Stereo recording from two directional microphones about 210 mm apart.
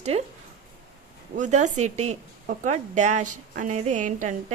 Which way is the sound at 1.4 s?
35° right (ahead or behind).